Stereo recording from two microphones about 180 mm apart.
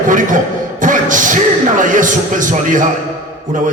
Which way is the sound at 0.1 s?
45° right (ahead or behind).